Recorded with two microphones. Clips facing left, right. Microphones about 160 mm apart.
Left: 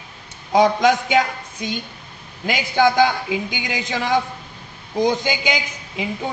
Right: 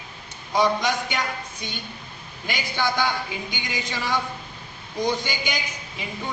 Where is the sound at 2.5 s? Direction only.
90° left.